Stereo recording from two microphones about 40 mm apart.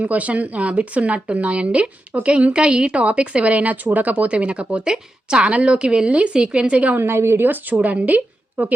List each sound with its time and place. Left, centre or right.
0.0 s a woman's voice: right
6.9 s a woman's voice: right
7.4 s speech: right